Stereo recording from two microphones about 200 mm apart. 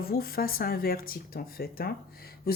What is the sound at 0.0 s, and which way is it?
Speech, 50° left (ahead or behind).